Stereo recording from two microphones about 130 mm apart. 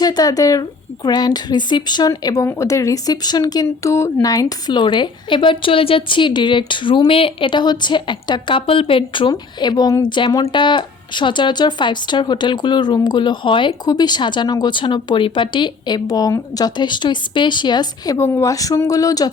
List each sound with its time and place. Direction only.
0.0 s a woman's voice: 30° left (ahead or behind)